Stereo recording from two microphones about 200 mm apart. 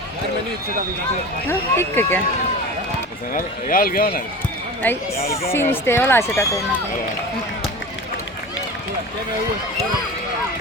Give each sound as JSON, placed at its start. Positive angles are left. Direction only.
{"t": 1.5, "sound": "speech", "side_deg": 10}
{"t": 3.3, "sound": "speech", "side_deg": 45}
{"t": 4.8, "sound": "speech", "side_deg": 10}